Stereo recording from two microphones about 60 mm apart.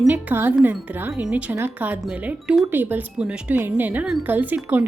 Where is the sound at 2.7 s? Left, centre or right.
Right.